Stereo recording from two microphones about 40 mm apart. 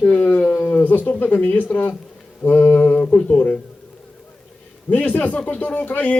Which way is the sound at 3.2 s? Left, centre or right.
Left.